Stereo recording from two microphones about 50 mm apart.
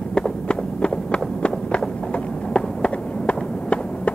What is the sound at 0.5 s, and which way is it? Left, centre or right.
Run, left.